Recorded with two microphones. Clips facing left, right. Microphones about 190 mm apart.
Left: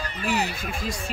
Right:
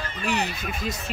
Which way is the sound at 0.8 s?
20° right (ahead or behind).